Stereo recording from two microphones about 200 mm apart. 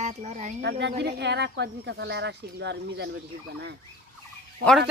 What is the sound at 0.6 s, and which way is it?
Speech, 60° right (ahead or behind).